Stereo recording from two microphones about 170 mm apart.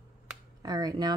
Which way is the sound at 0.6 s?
25° right (ahead or behind).